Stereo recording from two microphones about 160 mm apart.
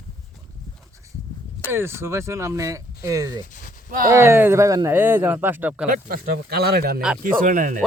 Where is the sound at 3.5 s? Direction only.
55° left (ahead or behind).